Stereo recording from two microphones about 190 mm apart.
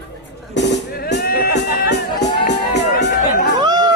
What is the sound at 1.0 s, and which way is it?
Music, 55° left (ahead or behind).